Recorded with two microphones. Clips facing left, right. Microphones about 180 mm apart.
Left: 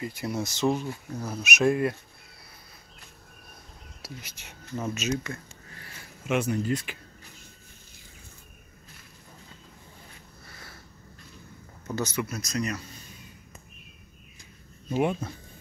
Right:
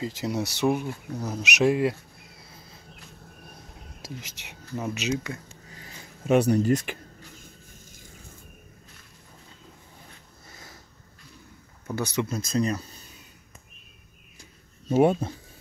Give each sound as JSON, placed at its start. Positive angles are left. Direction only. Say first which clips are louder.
{"t": 0.0, "sound": "speech", "louder": "right 3 dB", "side_deg": -20}
{"t": 4.5, "sound": "a sound", "louder": "right 1 dB", "side_deg": -15}
{"t": 6.2, "sound": "speech", "louder": "right 6 dB", "side_deg": -35}
{"t": 10.5, "sound": "sniff", "louder": "right 1 dB", "side_deg": -15}
{"t": 11.9, "sound": "speech", "louder": "right 2 dB", "side_deg": -15}
{"t": 12.4, "sound": "speech", "louder": "right 5 dB", "side_deg": -30}
{"t": 14.9, "sound": "speech", "louder": "right 6 dB", "side_deg": -40}